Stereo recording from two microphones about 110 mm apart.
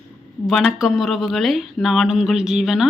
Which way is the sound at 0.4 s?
Centre (ahead or behind).